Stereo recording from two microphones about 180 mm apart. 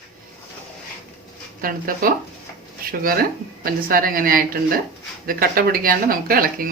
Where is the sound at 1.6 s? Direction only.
50° right (ahead or behind).